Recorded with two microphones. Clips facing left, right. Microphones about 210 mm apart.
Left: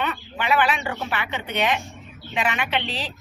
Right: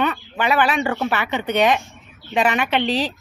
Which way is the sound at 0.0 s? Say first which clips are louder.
Right 6 dB; 45° right (ahead or behind).